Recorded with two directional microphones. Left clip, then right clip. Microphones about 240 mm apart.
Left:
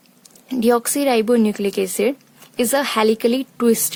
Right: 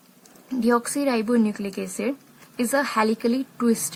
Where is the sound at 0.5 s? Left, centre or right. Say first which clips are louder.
Left 5 dB; left.